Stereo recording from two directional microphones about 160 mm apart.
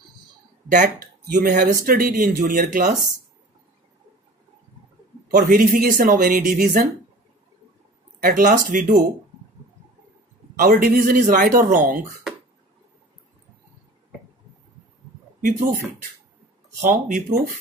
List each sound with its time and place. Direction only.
0.7 s speech: 55° right (ahead or behind)
5.3 s speech: 60° right (ahead or behind)
8.2 s speech: 60° right (ahead or behind)
10.5 s speech: 60° right (ahead or behind)
16.9 s speech: 55° right (ahead or behind)